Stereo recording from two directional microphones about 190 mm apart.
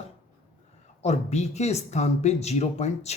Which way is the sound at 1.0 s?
35° left (ahead or behind).